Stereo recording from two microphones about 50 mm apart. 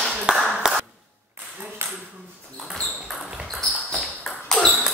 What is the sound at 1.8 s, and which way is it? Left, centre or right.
Ping, right.